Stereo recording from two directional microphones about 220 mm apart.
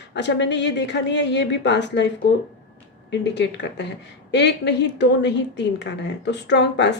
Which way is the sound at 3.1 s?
55° left (ahead or behind).